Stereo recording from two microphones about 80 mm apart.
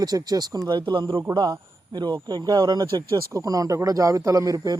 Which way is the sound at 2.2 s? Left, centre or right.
Right.